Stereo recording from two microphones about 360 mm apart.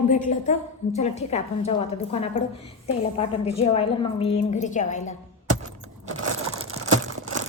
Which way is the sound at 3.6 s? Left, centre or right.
Centre.